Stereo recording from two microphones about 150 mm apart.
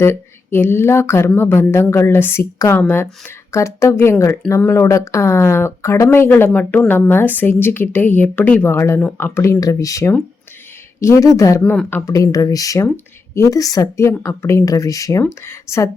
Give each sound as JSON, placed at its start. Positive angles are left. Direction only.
{"t": 0.0, "sound": "a woman's voice", "side_deg": 15}
{"t": 11.6, "sound": "a woman's voice", "side_deg": 10}